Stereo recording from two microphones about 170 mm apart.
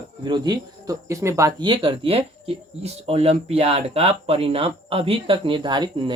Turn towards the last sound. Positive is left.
turn(degrees=-30)  # may be behind; listen again after turning